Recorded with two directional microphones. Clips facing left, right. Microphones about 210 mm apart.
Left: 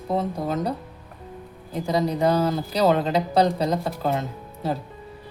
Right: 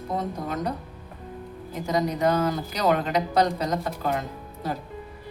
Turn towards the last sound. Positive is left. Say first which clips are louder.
# left 4 dB
turn(degrees=30)  # may be behind; listen again after turning